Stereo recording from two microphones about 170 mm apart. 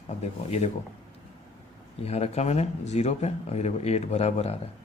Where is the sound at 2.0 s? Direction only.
40° left (ahead or behind).